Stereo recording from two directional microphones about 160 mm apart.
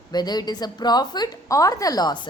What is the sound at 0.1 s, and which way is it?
A woman's voice, 25° left (ahead or behind).